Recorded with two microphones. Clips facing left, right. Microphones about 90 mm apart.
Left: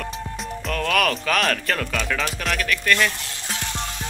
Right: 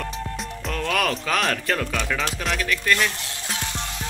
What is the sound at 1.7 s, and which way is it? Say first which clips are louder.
Speech: even; 5° right (ahead or behind).